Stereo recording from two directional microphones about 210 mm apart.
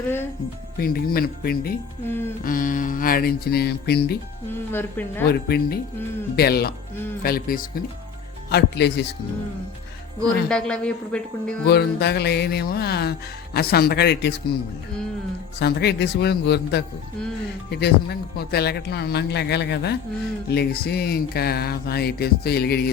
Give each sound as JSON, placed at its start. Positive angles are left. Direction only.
{"t": 0.8, "sound": "music", "side_deg": 45}
{"t": 2.0, "sound": "speech", "side_deg": 10}
{"t": 2.4, "sound": "music", "side_deg": 40}
{"t": 4.5, "sound": "speech", "side_deg": 10}
{"t": 5.3, "sound": "music", "side_deg": 50}
{"t": 10.5, "sound": "speech", "side_deg": 5}
{"t": 11.6, "sound": "music", "side_deg": 50}
{"t": 15.5, "sound": "music", "side_deg": 50}